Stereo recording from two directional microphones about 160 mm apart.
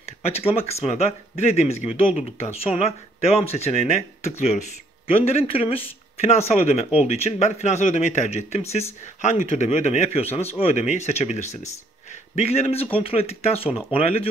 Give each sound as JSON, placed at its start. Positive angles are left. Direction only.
{"t": 0.2, "sound": "speech", "side_deg": 40}